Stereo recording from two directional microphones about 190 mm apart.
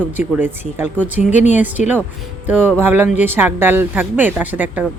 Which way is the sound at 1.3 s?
40° left (ahead or behind).